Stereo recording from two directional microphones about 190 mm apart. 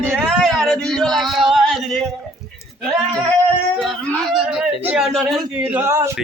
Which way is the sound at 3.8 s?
5° left (ahead or behind).